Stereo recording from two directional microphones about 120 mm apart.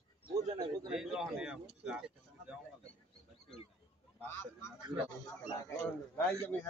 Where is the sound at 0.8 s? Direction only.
5° right (ahead or behind).